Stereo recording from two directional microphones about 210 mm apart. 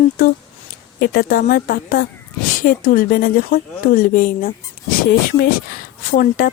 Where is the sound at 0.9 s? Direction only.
45° left (ahead or behind).